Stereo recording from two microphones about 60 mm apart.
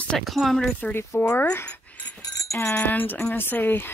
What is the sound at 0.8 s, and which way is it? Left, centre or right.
Speech, left.